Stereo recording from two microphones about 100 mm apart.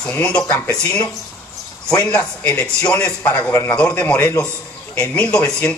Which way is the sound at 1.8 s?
10° left (ahead or behind).